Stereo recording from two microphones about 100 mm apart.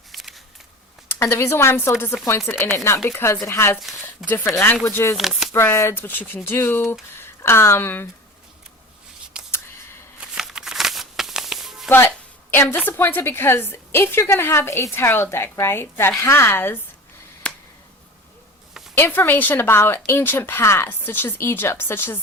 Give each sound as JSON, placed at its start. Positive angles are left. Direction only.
{"t": 0.1, "sound": "a sound", "side_deg": 0}
{"t": 1.1, "sound": "a woman's voice", "side_deg": 25}
{"t": 3.8, "sound": "speech", "side_deg": 0}
{"t": 4.3, "sound": "a woman's voice", "side_deg": 20}
{"t": 5.1, "sound": "speech", "side_deg": 0}
{"t": 5.5, "sound": "a woman's voice", "side_deg": 25}
{"t": 10.2, "sound": "a sound", "side_deg": -5}
{"t": 11.9, "sound": "a woman's voice", "side_deg": 20}
{"t": 17.4, "sound": "finger snapping", "side_deg": 10}
{"t": 18.9, "sound": "a woman's voice", "side_deg": 20}